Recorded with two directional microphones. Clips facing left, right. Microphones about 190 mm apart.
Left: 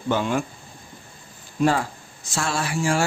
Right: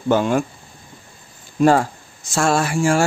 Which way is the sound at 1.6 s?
45° right (ahead or behind).